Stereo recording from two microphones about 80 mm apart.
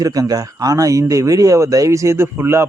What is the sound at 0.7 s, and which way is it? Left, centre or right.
Speech, right.